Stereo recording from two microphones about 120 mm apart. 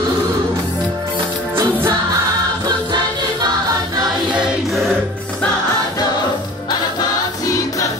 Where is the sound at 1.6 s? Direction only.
20° right (ahead or behind).